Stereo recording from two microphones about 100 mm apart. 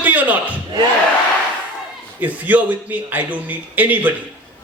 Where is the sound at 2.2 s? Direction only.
15° right (ahead or behind).